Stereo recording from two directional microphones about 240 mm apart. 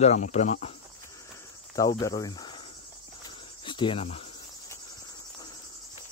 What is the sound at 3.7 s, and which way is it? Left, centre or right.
Speech, left.